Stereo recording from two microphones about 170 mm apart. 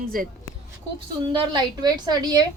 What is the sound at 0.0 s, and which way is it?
Speech, 60° right (ahead or behind).